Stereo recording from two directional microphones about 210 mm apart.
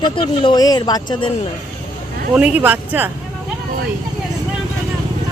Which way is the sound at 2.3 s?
5° right (ahead or behind).